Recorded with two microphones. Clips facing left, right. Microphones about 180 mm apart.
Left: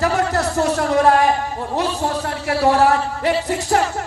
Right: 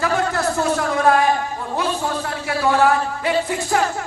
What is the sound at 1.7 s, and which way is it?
A man's voice, 40° left (ahead or behind).